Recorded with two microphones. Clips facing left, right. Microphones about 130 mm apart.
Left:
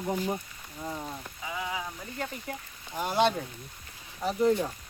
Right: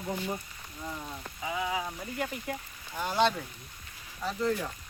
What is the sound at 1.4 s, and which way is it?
Frying, 20° right (ahead or behind).